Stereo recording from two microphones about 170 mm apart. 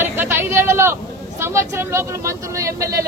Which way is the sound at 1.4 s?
15° right (ahead or behind).